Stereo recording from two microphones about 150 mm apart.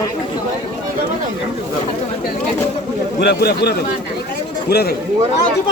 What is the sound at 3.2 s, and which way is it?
Speech, 90° left.